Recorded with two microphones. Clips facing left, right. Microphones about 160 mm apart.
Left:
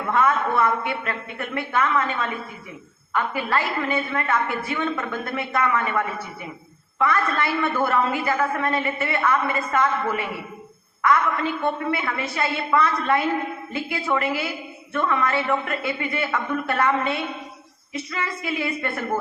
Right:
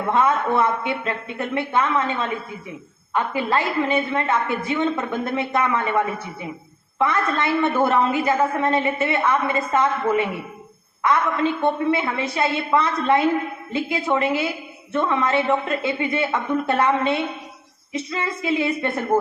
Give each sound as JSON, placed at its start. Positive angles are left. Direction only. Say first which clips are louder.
{"t": 0.1, "sound": "a woman's voice", "louder": "right 1 dB", "side_deg": -20}